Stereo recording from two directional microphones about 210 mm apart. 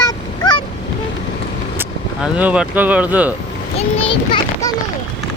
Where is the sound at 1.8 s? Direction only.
5° right (ahead or behind).